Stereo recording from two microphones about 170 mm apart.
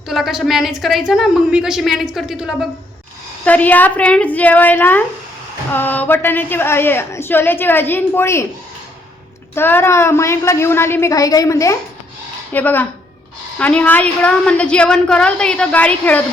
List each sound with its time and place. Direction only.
0.1 s a woman's voice: centre (ahead or behind)
3.4 s a woman's voice: 10° left (ahead or behind)
9.6 s a woman's voice: 15° left (ahead or behind)